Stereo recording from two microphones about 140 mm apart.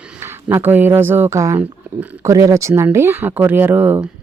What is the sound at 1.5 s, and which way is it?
Speech, 10° right (ahead or behind).